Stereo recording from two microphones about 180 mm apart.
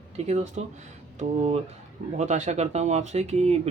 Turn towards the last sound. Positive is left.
turn(degrees=-35)  # may be behind; listen again after turning